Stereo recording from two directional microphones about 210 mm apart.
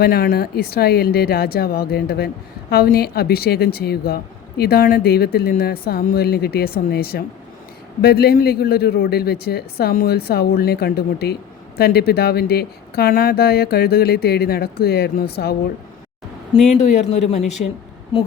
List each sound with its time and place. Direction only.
0.0 s speech: 45° left (ahead or behind)
16.7 s speech: 30° left (ahead or behind)